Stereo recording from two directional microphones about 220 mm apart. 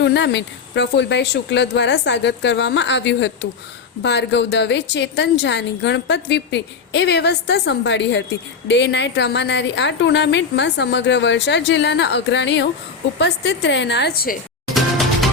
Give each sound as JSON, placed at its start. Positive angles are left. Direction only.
{"t": 0.0, "sound": "a woman's voice", "side_deg": 55}